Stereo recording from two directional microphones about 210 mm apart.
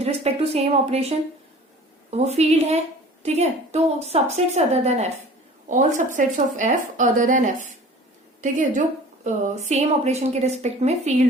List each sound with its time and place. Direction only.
0.0 s a woman's voice: 30° right (ahead or behind)